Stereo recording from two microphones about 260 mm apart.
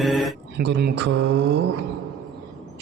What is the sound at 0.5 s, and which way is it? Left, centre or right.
Mantra, right.